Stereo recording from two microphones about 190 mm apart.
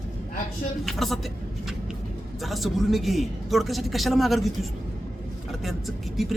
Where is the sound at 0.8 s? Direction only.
Centre (ahead or behind).